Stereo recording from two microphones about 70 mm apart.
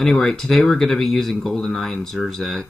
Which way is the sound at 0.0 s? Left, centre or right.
Centre.